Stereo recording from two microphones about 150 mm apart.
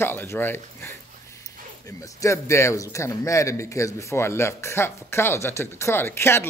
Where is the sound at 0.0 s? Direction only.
15° left (ahead or behind).